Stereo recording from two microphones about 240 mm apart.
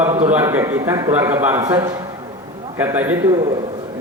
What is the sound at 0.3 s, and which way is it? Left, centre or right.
A man's voice, centre.